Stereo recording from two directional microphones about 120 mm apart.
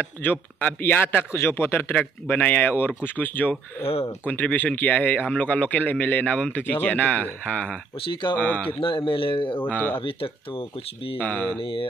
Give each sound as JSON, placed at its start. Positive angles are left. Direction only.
{"t": 0.2, "sound": "speech", "side_deg": 15}
{"t": 8.8, "sound": "speech", "side_deg": 45}
{"t": 9.6, "sound": "speech", "side_deg": 15}
{"t": 9.9, "sound": "speech", "side_deg": 50}
{"t": 11.1, "sound": "speech", "side_deg": 15}